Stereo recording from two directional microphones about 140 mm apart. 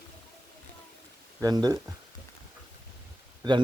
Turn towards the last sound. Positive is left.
turn(degrees=-30)  # may be behind; listen again after turning